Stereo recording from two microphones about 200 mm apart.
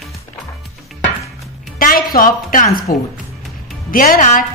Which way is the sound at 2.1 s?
45° left (ahead or behind).